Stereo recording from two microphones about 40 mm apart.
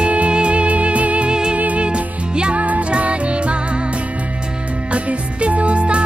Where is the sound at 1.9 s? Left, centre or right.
Right.